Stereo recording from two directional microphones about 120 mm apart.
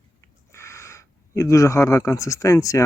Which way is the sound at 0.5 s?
25° left (ahead or behind).